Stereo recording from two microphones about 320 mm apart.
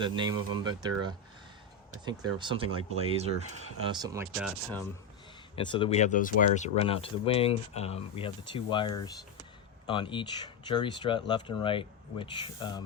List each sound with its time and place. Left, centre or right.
0.0 s speech: centre
4.4 s speech: centre
5.5 s speech: centre